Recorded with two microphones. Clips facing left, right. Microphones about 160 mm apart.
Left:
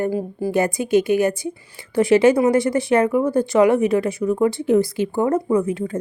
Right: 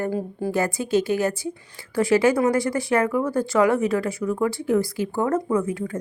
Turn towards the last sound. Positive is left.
turn(degrees=20)  # may be behind; listen again after turning